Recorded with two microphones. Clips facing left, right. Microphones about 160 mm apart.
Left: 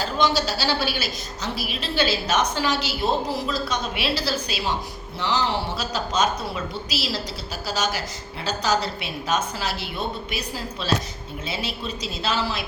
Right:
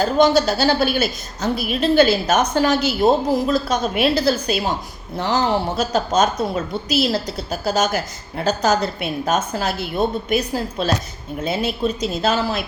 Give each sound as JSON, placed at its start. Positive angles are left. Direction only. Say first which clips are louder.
{"t": 0.0, "sound": "speech", "louder": "right 8 dB", "side_deg": -50}